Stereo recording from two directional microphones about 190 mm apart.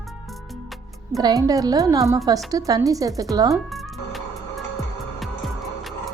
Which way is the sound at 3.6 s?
Centre (ahead or behind).